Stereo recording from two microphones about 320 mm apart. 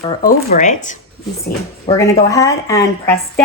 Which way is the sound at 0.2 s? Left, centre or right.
Left.